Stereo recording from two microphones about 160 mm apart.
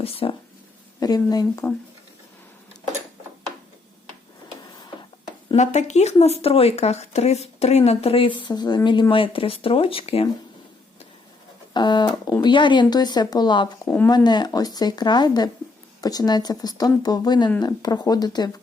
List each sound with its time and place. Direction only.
0.0 s speech: 35° left (ahead or behind)
0.9 s speech: 25° left (ahead or behind)
5.5 s speech: 45° left (ahead or behind)
11.7 s speech: 25° left (ahead or behind)
13.8 s speech: 10° left (ahead or behind)
14.3 s speech: 25° left (ahead or behind)